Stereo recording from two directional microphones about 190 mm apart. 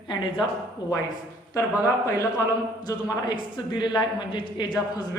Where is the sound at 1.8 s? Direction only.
15° left (ahead or behind).